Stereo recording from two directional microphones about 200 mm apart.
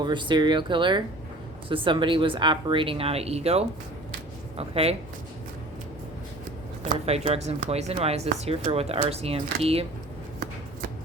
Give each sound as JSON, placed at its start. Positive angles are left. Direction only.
{"t": 0.0, "sound": "speech", "side_deg": -25}
{"t": 6.8, "sound": "speech", "side_deg": -30}